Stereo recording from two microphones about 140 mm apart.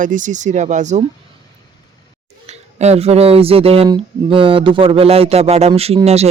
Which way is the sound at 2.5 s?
50° right (ahead or behind).